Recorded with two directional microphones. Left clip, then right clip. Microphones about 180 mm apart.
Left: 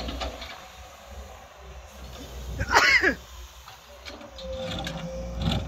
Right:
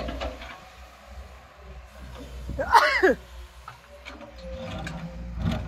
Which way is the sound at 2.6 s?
25° right (ahead or behind).